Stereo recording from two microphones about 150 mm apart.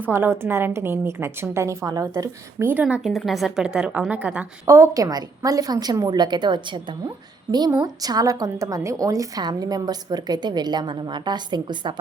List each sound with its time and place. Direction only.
0.0 s a woman's voice: 15° right (ahead or behind)
2.8 s a woman's voice: 5° right (ahead or behind)
4.6 s a woman's voice: 20° right (ahead or behind)